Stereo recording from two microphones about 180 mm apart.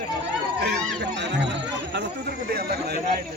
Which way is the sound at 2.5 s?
60° right (ahead or behind).